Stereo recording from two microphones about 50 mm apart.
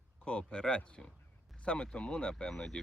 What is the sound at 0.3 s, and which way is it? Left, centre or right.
Speech, centre.